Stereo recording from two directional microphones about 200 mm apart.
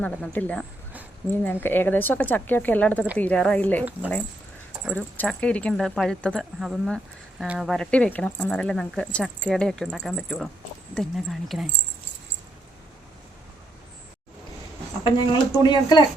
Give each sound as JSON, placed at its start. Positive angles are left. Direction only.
{"t": 0.0, "sound": "speech", "side_deg": 5}
{"t": 1.6, "sound": "speech", "side_deg": 10}
{"t": 4.9, "sound": "speech", "side_deg": 5}
{"t": 15.0, "sound": "speech", "side_deg": 20}